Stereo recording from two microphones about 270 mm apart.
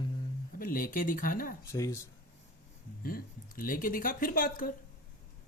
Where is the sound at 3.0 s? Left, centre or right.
Left.